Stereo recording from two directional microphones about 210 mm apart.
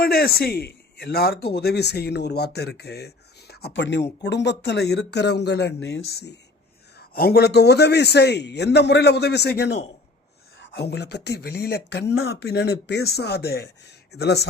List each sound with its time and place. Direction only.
0.0 s a man's voice: 45° left (ahead or behind)